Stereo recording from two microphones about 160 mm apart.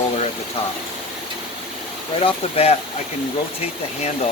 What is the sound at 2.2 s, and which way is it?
Speech, 40° left (ahead or behind).